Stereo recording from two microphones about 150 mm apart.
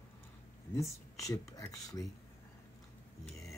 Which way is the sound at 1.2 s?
20° left (ahead or behind).